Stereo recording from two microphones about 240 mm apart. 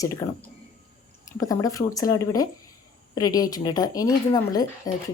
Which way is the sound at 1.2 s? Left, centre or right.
Centre.